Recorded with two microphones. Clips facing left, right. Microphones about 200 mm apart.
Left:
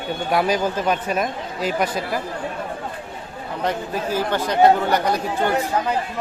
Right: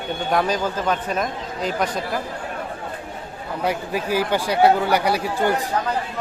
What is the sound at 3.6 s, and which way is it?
Speech, 10° right (ahead or behind).